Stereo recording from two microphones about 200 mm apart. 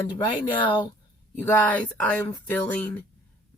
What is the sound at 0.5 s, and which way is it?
Speech, 25° left (ahead or behind).